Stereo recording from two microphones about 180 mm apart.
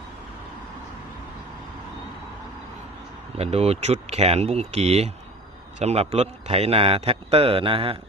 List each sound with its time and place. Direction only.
3.3 s a man's voice: 35° right (ahead or behind)